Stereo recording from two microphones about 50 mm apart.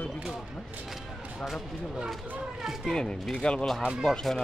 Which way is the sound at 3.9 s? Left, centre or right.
Centre.